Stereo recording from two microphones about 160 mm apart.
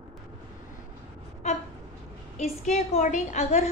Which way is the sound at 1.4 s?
45° left (ahead or behind).